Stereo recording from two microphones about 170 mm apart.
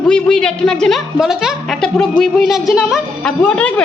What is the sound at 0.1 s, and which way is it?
Speech, 5° left (ahead or behind).